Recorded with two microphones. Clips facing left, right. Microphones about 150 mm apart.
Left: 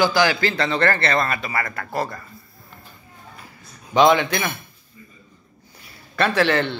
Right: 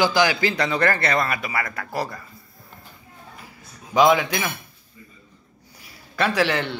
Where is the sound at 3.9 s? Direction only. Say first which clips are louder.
Left 1 dB; 5° right (ahead or behind).